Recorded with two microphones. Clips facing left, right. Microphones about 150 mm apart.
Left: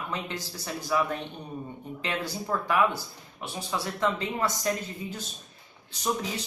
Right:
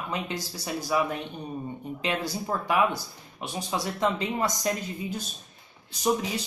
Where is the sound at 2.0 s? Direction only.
15° right (ahead or behind).